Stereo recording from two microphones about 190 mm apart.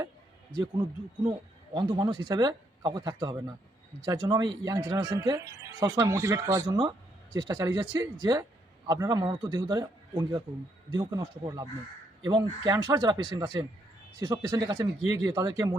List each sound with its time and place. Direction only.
0.5 s speech: 20° right (ahead or behind)